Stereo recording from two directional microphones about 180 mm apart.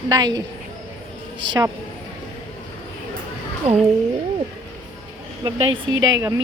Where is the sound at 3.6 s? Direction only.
35° right (ahead or behind).